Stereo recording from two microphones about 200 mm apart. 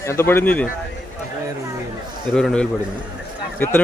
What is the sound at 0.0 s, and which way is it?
Speech, 15° left (ahead or behind).